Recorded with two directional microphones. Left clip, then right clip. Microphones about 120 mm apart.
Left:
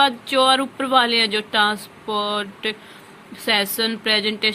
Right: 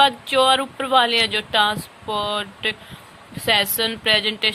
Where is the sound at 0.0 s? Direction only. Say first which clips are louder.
Right 1 dB; 15° right (ahead or behind).